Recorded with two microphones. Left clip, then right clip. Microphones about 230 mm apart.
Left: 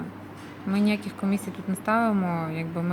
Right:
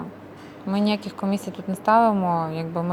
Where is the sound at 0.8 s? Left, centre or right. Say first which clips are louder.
Right 3 dB; centre.